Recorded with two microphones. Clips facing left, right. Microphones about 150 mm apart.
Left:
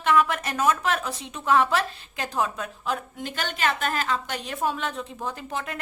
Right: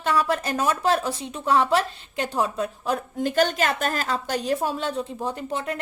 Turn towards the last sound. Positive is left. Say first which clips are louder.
# right 4 dB
turn(degrees=-30)  # may be behind; listen again after turning